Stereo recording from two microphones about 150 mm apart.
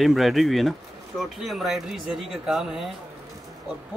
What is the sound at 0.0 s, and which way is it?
Speech, centre (ahead or behind).